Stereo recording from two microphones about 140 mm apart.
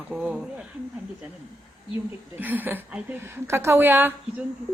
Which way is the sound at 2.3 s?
15° right (ahead or behind).